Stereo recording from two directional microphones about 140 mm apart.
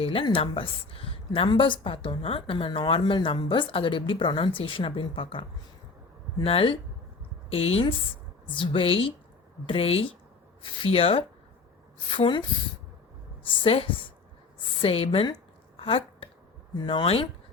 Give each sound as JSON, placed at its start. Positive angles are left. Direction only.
{"t": 0.0, "sound": "a woman's voice", "side_deg": 40}
{"t": 13.5, "sound": "a woman's voice", "side_deg": 40}
{"t": 15.8, "sound": "a sound", "side_deg": 40}
{"t": 16.7, "sound": "a woman's voice", "side_deg": 35}